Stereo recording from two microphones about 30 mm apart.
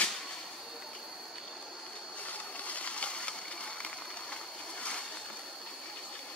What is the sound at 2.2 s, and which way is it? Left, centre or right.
Water, left.